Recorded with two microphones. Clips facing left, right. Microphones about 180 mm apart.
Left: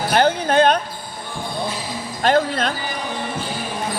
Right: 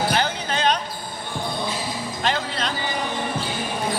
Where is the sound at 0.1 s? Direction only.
50° left (ahead or behind).